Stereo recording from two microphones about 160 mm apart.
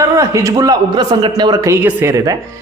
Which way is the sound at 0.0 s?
20° right (ahead or behind).